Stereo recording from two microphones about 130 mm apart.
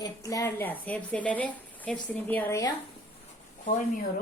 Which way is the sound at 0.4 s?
15° left (ahead or behind).